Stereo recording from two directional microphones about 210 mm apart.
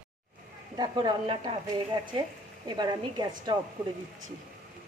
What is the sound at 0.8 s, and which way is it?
A woman's voice, 20° right (ahead or behind).